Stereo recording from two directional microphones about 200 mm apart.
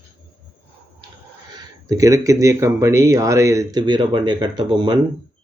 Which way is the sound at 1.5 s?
15° right (ahead or behind).